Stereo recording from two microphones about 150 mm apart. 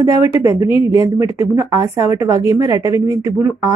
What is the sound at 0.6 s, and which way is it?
Speech, 35° left (ahead or behind).